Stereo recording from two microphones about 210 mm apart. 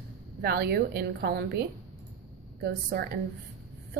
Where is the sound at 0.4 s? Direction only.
50° right (ahead or behind).